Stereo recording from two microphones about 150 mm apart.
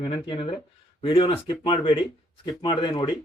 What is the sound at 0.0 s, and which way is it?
Speech, 35° left (ahead or behind).